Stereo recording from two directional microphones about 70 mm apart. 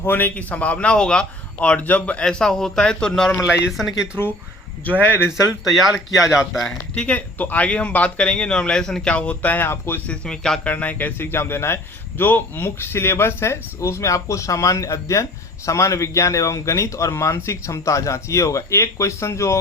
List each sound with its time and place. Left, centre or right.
0.0 s a man's voice: left; by 3.1 s centre
3.7 s speech: centre
4.9 s speech: left
5.6 s speech: centre
6.2 s a man's voice: left
6.7 s a man's voice: centre
9.1 s speech: centre
10.1 s a man's voice: centre
10.7 s a man's voice: left